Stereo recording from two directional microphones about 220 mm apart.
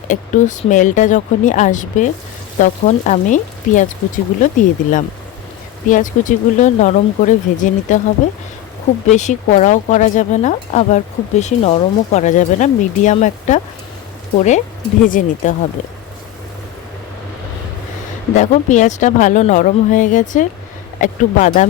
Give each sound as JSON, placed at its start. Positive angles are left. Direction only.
{"t": 0.1, "sound": "speech", "side_deg": 35}
{"t": 5.9, "sound": "speech", "side_deg": 35}
{"t": 9.0, "sound": "speech", "side_deg": 30}
{"t": 18.3, "sound": "speech", "side_deg": 35}